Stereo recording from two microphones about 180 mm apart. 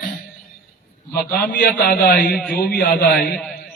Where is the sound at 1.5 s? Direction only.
65° left (ahead or behind).